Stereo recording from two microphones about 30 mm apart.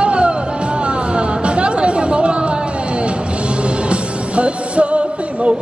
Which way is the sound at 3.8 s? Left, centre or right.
Right.